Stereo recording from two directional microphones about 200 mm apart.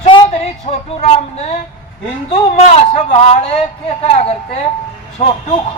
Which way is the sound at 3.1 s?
30° left (ahead or behind).